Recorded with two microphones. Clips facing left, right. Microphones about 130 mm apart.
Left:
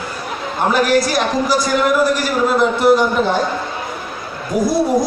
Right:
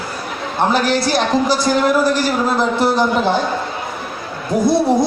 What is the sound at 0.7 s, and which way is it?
A man's voice, 30° right (ahead or behind).